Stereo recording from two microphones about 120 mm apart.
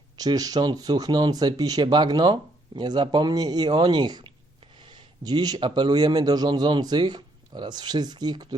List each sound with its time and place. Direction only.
0.2 s speech: 30° right (ahead or behind)